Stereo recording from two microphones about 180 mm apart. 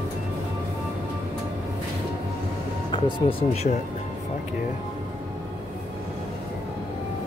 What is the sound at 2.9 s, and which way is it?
Speech, 30° left (ahead or behind).